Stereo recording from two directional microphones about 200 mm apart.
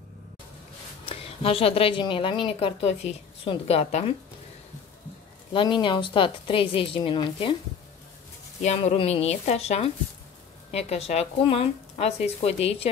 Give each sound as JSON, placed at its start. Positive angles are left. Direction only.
{"t": 1.0, "sound": "speech", "side_deg": 30}
{"t": 5.5, "sound": "speech", "side_deg": 25}
{"t": 8.6, "sound": "speech", "side_deg": 30}